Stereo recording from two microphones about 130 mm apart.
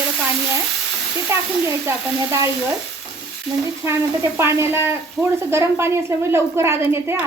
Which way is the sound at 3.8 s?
20° right (ahead or behind).